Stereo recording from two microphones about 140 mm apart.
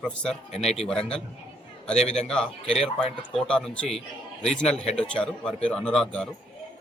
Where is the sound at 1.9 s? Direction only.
50° left (ahead or behind).